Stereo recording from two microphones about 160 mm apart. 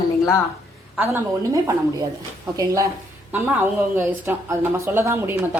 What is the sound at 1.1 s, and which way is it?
A woman's voice, 20° right (ahead or behind).